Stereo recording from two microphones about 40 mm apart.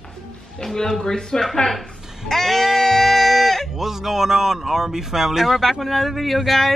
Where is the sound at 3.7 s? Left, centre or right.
Centre.